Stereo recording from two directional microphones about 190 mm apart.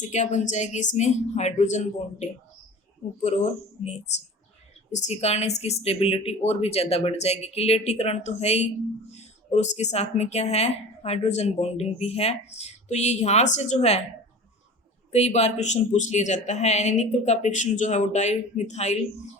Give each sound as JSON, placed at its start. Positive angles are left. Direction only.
{"t": 0.0, "sound": "a woman's voice", "side_deg": 40}
{"t": 15.1, "sound": "a woman's voice", "side_deg": 35}